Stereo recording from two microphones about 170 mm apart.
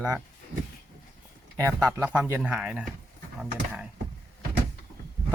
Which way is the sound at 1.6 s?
20° right (ahead or behind).